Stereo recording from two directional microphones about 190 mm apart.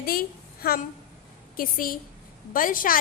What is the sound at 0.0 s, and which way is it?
A woman's voice, 50° left (ahead or behind).